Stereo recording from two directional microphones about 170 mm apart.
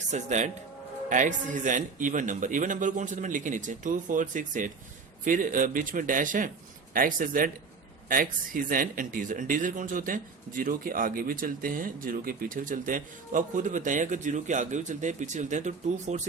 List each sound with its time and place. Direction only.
0.1 s a man's voice: 45° right (ahead or behind)